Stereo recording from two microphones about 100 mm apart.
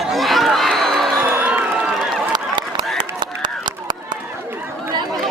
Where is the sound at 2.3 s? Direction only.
45° right (ahead or behind).